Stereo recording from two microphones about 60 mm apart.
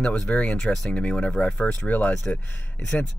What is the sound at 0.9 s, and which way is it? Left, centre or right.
Speech, centre.